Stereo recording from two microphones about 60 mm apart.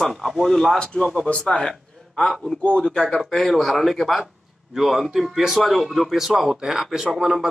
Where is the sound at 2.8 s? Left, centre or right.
Centre.